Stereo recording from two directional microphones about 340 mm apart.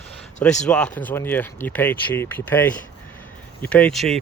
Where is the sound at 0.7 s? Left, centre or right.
Centre.